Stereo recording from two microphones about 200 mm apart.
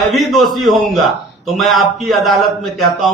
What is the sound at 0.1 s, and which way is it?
A man's voice, centre (ahead or behind).